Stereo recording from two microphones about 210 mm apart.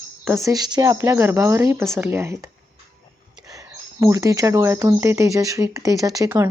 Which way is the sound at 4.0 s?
15° right (ahead or behind).